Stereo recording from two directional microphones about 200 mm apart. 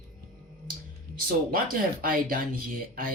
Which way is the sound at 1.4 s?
45° right (ahead or behind).